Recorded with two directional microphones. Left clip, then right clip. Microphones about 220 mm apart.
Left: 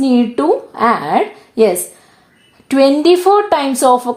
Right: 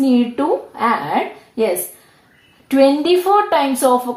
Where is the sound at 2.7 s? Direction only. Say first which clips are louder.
Left 3 dB; 55° left (ahead or behind).